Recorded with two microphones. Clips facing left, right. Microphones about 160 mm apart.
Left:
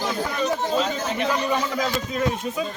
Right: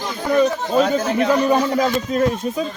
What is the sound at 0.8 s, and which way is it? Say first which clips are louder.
A man's voice: right 7 dB; 50° right (ahead or behind).